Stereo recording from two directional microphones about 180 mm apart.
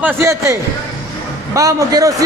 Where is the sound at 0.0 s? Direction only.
15° right (ahead or behind).